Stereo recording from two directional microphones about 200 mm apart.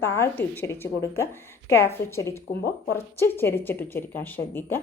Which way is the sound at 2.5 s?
45° left (ahead or behind).